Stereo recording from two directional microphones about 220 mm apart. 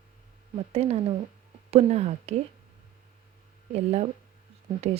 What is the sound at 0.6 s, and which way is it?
Speech, 30° right (ahead or behind).